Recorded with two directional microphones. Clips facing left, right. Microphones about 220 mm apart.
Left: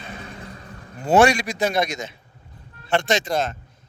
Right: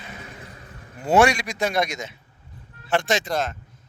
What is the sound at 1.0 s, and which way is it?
Speech, 30° left (ahead or behind).